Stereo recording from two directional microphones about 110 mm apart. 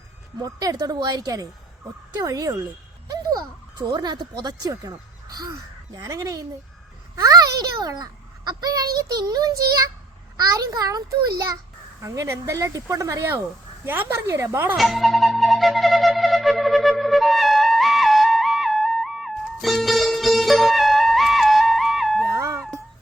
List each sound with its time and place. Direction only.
0.4 s a child's voice: 35° right (ahead or behind)
14.8 s flute: centre (ahead or behind)
22.3 s dog: 25° right (ahead or behind)